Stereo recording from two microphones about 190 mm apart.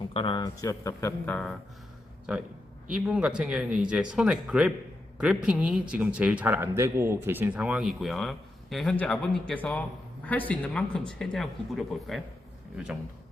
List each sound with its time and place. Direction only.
0.1 s a man's voice: 30° left (ahead or behind); by 1.5 s 5° left (ahead or behind)
2.8 s a man's voice: 5° right (ahead or behind)